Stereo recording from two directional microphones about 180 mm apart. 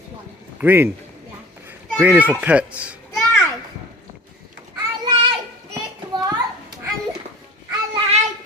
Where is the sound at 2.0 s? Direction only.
10° right (ahead or behind).